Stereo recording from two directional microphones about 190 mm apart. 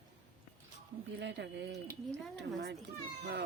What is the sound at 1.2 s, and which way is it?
Speech, 65° right (ahead or behind).